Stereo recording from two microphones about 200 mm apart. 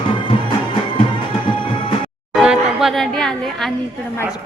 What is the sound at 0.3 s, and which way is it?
Music, 25° left (ahead or behind).